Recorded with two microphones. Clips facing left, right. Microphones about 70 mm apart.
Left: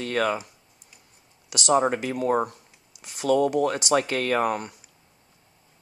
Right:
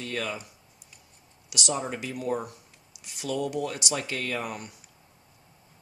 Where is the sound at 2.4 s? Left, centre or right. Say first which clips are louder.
Left 9 dB; left.